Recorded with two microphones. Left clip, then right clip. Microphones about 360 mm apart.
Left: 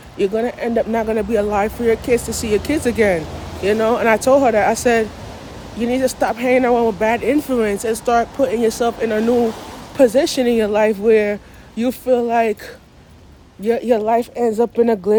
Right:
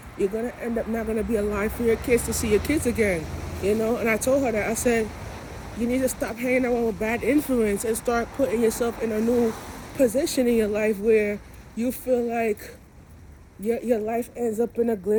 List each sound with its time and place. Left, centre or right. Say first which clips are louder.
0.2 s speech: left 8 dB; centre
13.7 s speech: left 9 dB; centre